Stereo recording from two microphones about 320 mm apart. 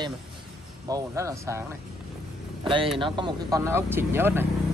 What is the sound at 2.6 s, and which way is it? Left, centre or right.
Speech, centre.